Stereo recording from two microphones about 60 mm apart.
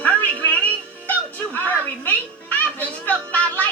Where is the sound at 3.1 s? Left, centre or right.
Left.